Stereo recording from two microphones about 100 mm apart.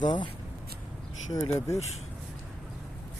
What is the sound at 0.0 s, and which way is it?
Speech, 50° left (ahead or behind).